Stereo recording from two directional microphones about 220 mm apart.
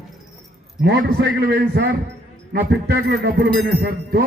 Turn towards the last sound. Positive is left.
turn(degrees=-45)  # may be behind; listen again after turning